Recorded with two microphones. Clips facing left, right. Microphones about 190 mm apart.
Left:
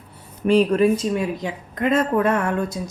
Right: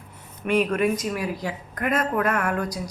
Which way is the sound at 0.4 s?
30° left (ahead or behind).